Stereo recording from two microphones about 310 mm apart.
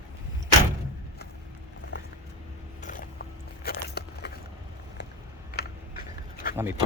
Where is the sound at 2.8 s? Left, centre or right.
Left.